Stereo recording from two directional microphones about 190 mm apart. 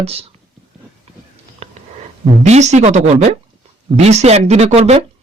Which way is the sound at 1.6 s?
35° right (ahead or behind).